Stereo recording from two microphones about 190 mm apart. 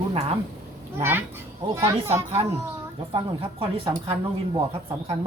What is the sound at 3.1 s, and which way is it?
Speech, 25° right (ahead or behind).